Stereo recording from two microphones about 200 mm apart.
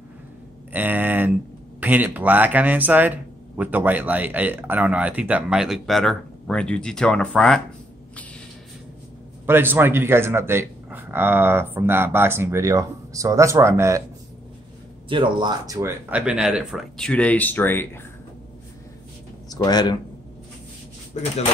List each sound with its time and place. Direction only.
0.7 s speech: 10° right (ahead or behind)
9.5 s speech: 10° right (ahead or behind)
15.0 s speech: 25° right (ahead or behind); by 18.0 s 10° left (ahead or behind)
19.5 s speech: 20° left (ahead or behind)
21.1 s speech: 35° left (ahead or behind)